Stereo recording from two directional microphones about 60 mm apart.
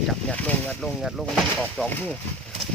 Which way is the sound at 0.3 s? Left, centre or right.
Left.